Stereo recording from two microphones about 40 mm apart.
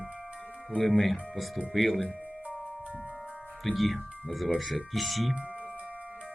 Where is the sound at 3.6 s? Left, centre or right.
Centre.